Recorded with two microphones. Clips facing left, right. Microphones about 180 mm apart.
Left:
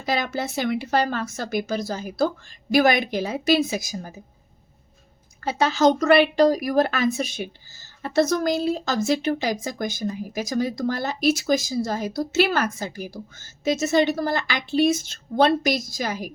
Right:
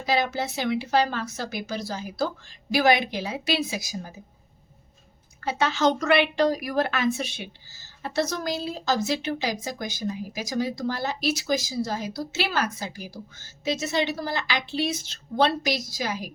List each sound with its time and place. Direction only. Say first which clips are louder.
0.0 s a woman's voice: even; 50° left (ahead or behind)
5.5 s a woman's voice: left 4 dB; 40° left (ahead or behind)